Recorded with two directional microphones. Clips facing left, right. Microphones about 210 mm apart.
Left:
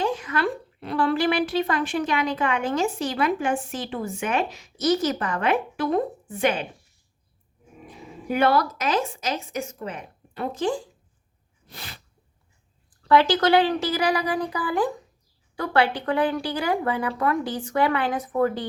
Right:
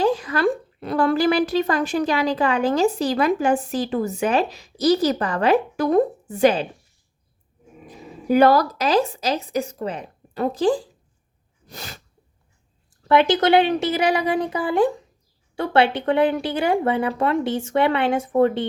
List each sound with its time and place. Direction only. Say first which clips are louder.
0.0 s a woman's voice: right 5 dB; 35° right (ahead or behind)
7.9 s a woman's voice: right 7 dB; 40° right (ahead or behind)
11.6 s sneeze: right 4 dB; 45° right (ahead or behind)
12.9 s speech: right 2 dB; 20° right (ahead or behind)